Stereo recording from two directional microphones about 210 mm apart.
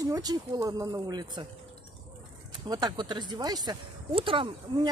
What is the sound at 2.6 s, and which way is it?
Speech, 20° right (ahead or behind).